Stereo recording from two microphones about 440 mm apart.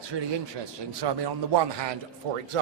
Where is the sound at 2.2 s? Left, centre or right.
Right.